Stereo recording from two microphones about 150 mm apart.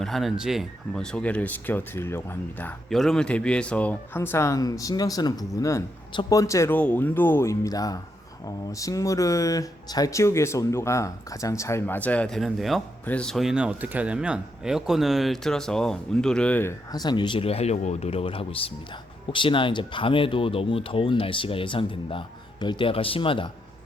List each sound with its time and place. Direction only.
0.0 s speech: centre (ahead or behind)
2.9 s speech: 5° left (ahead or behind)
16.9 s speech: 30° left (ahead or behind)